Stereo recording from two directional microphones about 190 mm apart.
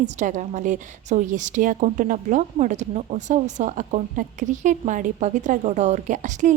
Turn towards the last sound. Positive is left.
turn(degrees=-40)  # may be behind; listen again after turning